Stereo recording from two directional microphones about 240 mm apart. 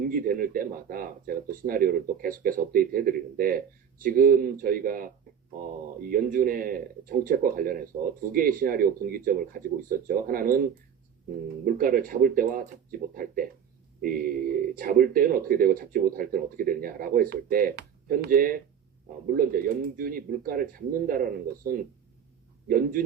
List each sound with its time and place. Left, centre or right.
0.1 s a man's voice: right